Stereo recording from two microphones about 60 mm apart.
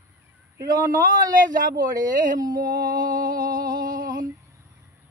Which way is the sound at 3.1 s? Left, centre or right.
Right.